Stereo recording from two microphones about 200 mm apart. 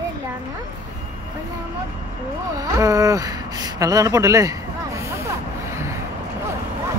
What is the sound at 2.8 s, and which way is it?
Speech, 15° right (ahead or behind).